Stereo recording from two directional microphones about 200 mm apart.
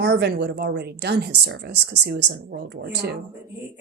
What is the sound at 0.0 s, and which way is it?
A woman's voice, 55° right (ahead or behind).